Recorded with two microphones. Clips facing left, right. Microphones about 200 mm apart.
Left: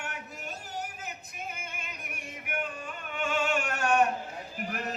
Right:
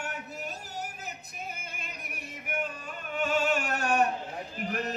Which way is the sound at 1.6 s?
40° right (ahead or behind).